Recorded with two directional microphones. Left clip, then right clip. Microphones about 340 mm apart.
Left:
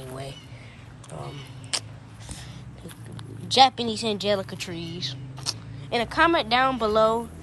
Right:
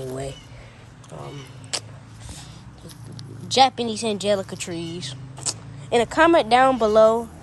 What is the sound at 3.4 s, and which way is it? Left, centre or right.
Speech, centre.